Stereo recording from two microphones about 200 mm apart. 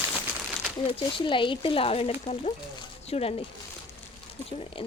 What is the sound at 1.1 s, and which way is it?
Speech, 25° left (ahead or behind).